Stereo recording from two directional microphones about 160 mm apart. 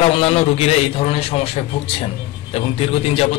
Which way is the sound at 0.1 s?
40° left (ahead or behind).